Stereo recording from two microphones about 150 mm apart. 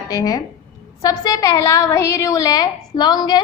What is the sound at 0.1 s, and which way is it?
A woman's voice, 25° left (ahead or behind).